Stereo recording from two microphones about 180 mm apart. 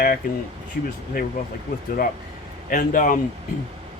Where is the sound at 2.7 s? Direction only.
50° left (ahead or behind).